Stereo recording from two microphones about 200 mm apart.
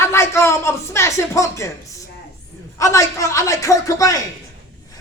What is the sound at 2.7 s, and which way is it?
Speech, 15° left (ahead or behind).